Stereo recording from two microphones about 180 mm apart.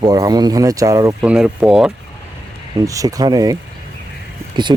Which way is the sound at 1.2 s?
5° right (ahead or behind).